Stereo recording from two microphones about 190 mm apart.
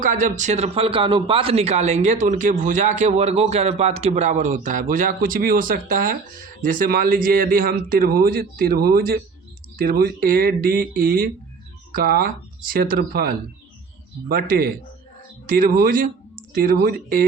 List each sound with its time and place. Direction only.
0.0 s a man's voice: 45° right (ahead or behind)